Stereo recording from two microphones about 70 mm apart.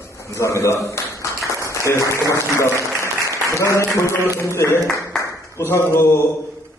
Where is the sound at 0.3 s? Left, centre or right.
Left.